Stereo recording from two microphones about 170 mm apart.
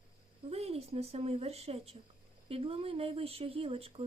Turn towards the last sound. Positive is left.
turn(degrees=-35)  # may be behind; listen again after turning